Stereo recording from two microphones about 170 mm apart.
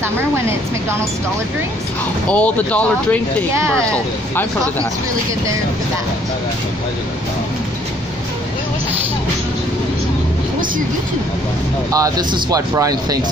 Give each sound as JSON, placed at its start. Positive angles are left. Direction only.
{"t": 2.2, "sound": "speech", "side_deg": 10}
{"t": 11.9, "sound": "speech", "side_deg": -20}